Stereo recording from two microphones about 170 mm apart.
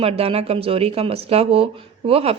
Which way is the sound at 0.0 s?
35° right (ahead or behind).